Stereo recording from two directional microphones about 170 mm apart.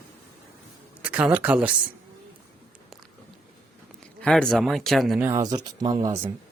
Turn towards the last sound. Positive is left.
turn(degrees=-20)  # may be behind; listen again after turning